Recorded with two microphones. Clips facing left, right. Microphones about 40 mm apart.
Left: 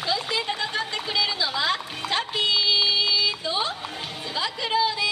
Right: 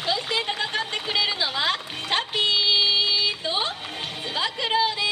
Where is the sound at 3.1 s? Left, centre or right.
Right.